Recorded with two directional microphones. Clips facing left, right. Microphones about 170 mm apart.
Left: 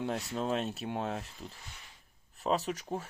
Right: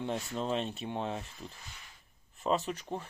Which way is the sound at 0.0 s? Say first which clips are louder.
Left 1 dB; centre (ahead or behind).